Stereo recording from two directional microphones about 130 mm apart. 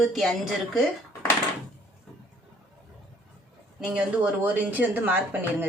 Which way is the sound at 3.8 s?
5° right (ahead or behind).